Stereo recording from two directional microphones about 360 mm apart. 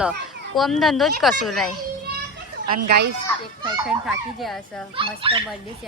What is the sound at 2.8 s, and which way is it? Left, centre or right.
Speech, right.